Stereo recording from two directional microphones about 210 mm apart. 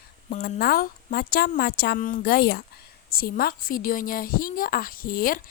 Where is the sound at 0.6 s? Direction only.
45° left (ahead or behind).